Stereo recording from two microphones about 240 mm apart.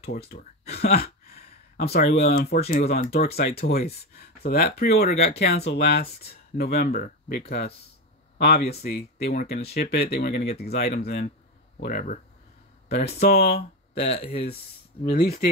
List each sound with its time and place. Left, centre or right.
0.3 s speech: left
13.9 s speech: left